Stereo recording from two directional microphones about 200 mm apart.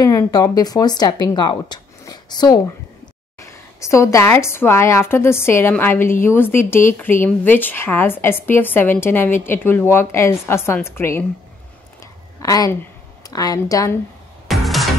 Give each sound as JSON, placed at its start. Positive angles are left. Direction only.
{"t": 0.0, "sound": "speech", "side_deg": 20}
{"t": 12.0, "sound": "a sound", "side_deg": 15}
{"t": 13.2, "sound": "speech", "side_deg": 20}
{"t": 14.5, "sound": "music", "side_deg": 0}